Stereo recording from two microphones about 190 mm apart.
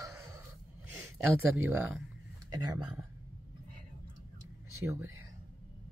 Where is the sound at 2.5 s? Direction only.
20° right (ahead or behind).